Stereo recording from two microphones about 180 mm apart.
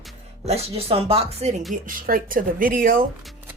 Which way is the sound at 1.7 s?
50° right (ahead or behind).